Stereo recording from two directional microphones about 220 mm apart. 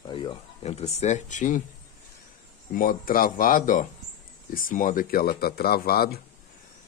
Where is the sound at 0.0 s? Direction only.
20° left (ahead or behind).